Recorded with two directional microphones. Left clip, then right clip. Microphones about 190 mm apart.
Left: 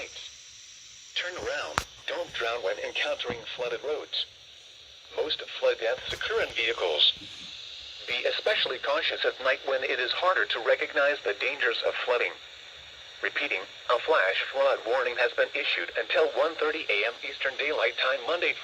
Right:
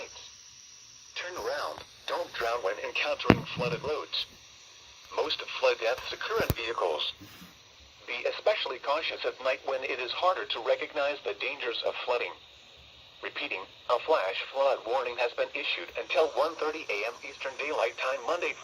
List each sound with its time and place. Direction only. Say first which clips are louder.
1.2 s radio: left 1 dB; 20° left (ahead or behind)
2.4 s speech: left 2 dB; 35° left (ahead or behind)
5.4 s speech: even; 35° left (ahead or behind)
8.0 s speech: left 1 dB; 45° left (ahead or behind)